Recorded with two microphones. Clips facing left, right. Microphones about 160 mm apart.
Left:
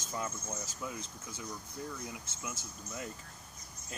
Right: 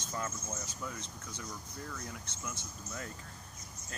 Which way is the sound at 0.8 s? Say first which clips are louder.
Left 1 dB; 10° left (ahead or behind).